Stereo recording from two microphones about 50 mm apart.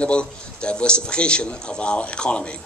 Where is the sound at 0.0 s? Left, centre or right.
Left.